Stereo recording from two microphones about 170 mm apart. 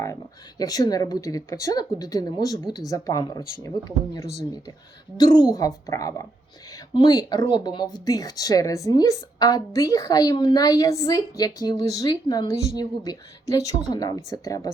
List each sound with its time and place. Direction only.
0.6 s speech: 20° left (ahead or behind)